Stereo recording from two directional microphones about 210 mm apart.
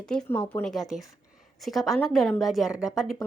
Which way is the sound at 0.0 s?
5° left (ahead or behind).